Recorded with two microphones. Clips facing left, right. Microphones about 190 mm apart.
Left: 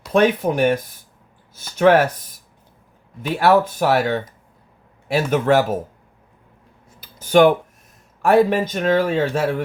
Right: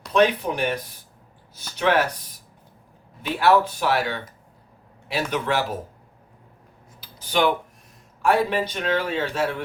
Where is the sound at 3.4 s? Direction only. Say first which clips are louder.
Left 3 dB; 45° left (ahead or behind).